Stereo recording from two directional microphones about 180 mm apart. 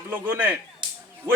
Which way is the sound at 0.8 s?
25° right (ahead or behind).